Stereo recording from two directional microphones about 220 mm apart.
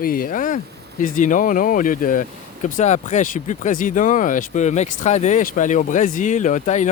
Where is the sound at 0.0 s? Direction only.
40° left (ahead or behind).